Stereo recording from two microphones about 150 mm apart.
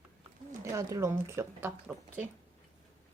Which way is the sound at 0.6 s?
20° right (ahead or behind).